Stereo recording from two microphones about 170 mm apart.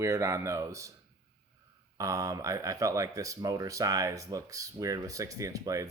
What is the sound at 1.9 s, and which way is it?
Speech, 20° right (ahead or behind).